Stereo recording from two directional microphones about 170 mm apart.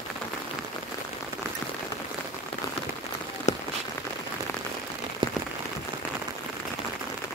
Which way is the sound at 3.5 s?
45° left (ahead or behind).